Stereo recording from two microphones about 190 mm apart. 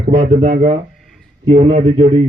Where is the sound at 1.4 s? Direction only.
30° right (ahead or behind).